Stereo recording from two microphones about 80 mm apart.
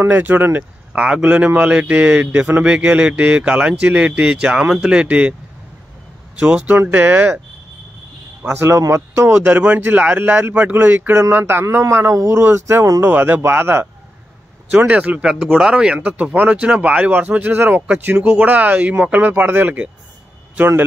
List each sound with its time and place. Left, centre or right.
0.0 s speech: right
6.4 s speech: centre
8.5 s speech: right
13.0 s speech: right
14.7 s a man's voice: centre